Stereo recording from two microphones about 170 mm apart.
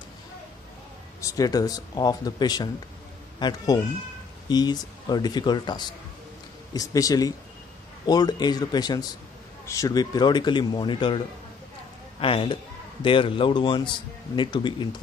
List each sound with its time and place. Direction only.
1.2 s a man's voice: 20° left (ahead or behind)